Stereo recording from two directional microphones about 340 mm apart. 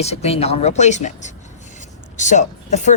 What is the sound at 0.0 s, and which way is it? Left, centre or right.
Speech, centre.